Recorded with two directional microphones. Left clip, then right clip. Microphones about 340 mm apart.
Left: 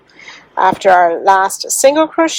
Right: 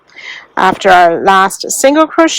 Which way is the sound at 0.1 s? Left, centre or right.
Right.